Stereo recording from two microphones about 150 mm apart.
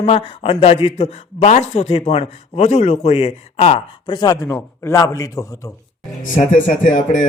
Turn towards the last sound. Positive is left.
turn(degrees=55)  # may be behind; listen again after turning